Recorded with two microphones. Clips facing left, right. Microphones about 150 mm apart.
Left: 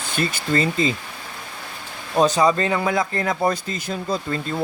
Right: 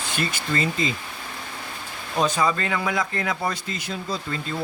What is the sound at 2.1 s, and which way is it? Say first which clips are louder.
Speech: left 5 dB; 35° left (ahead or behind).